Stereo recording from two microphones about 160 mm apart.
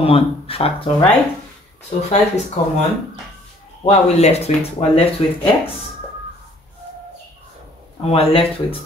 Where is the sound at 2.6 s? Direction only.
40° left (ahead or behind).